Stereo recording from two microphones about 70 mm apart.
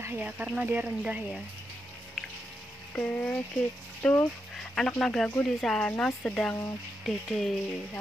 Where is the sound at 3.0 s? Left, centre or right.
Centre.